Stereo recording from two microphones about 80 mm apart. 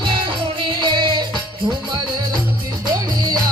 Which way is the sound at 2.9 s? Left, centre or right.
Right.